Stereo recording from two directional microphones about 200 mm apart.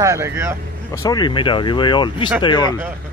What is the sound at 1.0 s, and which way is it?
Speech, 20° left (ahead or behind).